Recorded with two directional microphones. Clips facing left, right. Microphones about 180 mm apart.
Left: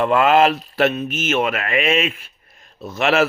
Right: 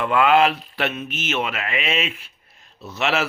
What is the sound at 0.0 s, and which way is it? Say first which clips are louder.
Speech: left 3 dB; 40° left (ahead or behind).